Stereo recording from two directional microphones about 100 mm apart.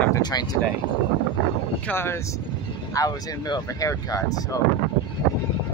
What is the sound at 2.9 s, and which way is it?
Speech, 35° left (ahead or behind).